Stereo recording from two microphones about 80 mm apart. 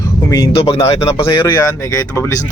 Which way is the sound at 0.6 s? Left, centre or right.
Left.